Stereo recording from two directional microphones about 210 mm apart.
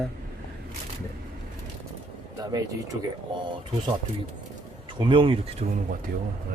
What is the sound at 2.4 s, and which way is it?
Speech, 20° right (ahead or behind).